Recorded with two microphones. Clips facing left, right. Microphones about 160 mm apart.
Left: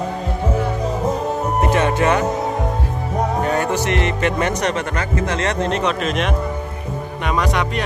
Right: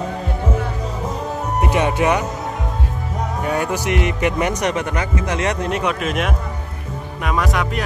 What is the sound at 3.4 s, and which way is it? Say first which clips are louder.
Speech: right 2 dB; 10° right (ahead or behind).